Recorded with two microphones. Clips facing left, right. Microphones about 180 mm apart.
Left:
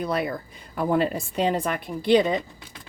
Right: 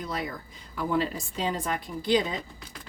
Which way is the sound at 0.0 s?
65° left (ahead or behind).